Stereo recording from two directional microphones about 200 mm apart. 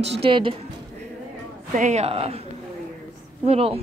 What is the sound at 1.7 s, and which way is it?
Speech, 35° right (ahead or behind).